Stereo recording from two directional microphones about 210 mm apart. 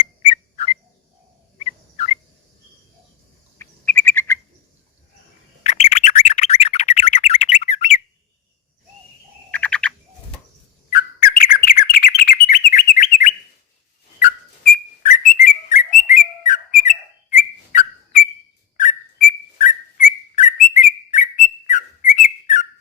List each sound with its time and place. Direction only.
0.3 s a sound: 30° left (ahead or behind)
3.6 s bird: 10° left (ahead or behind)
5.6 s chirp tone: 30° left (ahead or behind)
9.5 s bird: 5° left (ahead or behind)
10.9 s bird: 45° left (ahead or behind)
14.2 s whistling: 40° left (ahead or behind)